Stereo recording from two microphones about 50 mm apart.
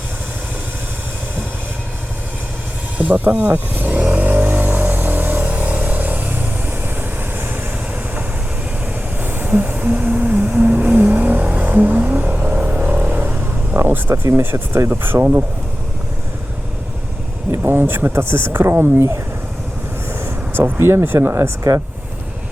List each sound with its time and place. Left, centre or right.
3.0 s speech: right
3.5 s vehicle: right
9.2 s vehicle: right
11.6 s music: right
12.8 s vehicle: right
13.7 s a sound: right
14.8 s speech: right
17.6 s speech: right
20.1 s speech: right